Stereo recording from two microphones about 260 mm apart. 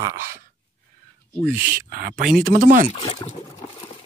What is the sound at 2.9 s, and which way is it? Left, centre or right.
Speech, left.